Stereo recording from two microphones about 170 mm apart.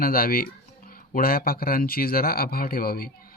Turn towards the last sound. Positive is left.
turn(degrees=60)  # may be behind; listen again after turning